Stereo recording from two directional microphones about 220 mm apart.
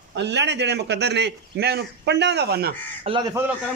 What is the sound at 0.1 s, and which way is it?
A man's voice, 50° right (ahead or behind).